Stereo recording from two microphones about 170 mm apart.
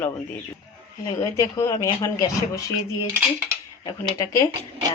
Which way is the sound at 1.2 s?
20° left (ahead or behind).